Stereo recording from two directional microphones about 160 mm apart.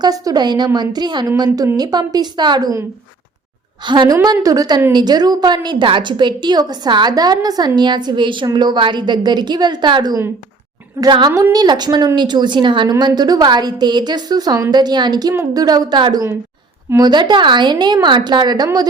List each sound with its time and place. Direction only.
0.0 s a woman's voice: 25° right (ahead or behind)
3.8 s a woman's voice: 30° right (ahead or behind)